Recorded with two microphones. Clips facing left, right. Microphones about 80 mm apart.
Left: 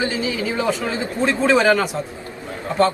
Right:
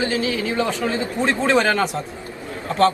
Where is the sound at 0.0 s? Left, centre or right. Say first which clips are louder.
Right 1 dB; centre.